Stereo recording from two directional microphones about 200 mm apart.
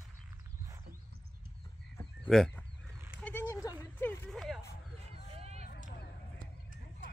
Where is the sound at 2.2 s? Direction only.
5° left (ahead or behind).